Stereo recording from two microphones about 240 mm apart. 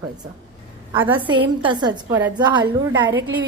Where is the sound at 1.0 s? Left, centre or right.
Centre.